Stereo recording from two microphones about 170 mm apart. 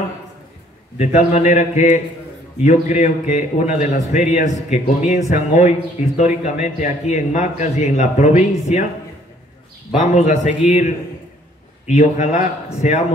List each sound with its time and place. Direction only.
0.9 s a man's voice: 40° left (ahead or behind)
9.9 s a man's voice: 45° left (ahead or behind)
11.9 s a man's voice: 45° left (ahead or behind)